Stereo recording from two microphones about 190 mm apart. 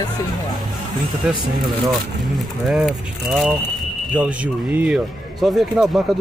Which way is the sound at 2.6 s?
Centre (ahead or behind).